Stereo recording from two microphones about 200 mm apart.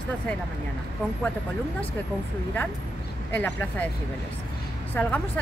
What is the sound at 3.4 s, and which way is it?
Speech, 10° left (ahead or behind).